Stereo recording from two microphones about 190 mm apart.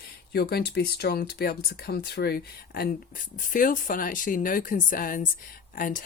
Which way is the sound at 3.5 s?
45° left (ahead or behind).